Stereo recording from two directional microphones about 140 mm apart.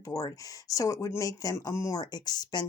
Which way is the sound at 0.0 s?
25° left (ahead or behind).